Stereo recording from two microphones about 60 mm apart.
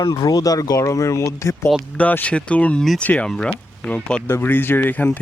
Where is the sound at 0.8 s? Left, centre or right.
Left.